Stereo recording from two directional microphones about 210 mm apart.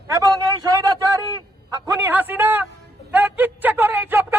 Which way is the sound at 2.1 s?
10° right (ahead or behind).